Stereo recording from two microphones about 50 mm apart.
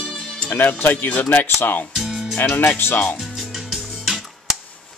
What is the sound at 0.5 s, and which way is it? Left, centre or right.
Speech, left.